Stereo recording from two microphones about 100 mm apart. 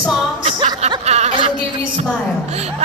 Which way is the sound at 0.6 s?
90° right.